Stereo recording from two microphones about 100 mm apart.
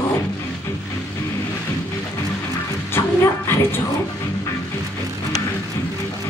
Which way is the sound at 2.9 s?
25° left (ahead or behind).